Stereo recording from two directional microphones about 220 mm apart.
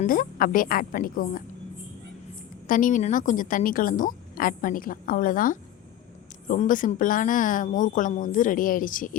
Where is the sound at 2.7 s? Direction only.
35° left (ahead or behind).